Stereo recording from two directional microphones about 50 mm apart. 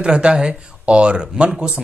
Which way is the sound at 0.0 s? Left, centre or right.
Centre.